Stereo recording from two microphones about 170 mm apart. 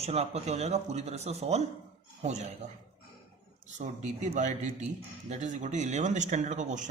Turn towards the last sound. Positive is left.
turn(degrees=-45)  # may be behind; listen again after turning